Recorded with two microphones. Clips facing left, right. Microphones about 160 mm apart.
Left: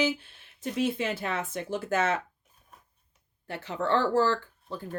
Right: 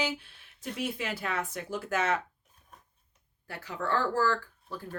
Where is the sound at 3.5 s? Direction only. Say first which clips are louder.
Left 4 dB; 25° left (ahead or behind).